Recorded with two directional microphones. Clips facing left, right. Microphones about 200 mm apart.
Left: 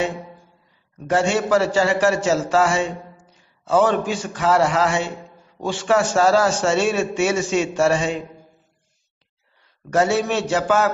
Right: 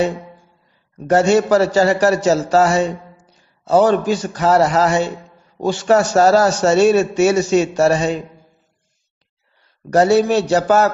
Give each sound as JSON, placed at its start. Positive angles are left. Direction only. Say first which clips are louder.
{"t": 1.0, "sound": "a man's voice", "louder": "right 6 dB", "side_deg": -40}
{"t": 9.8, "sound": "a man's voice", "louder": "right 6 dB", "side_deg": -35}